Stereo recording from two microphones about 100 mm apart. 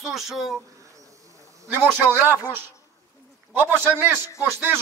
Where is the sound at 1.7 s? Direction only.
20° right (ahead or behind).